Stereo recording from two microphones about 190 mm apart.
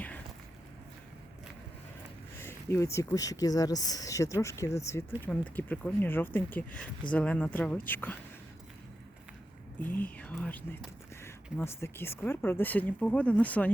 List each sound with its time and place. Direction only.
2.4 s speech: 15° left (ahead or behind)
10.0 s speech: 5° left (ahead or behind)